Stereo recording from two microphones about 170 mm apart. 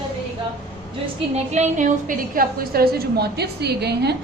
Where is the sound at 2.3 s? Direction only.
60° right (ahead or behind).